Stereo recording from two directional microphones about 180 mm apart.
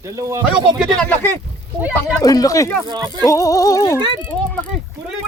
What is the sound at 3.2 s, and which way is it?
Music, 20° left (ahead or behind).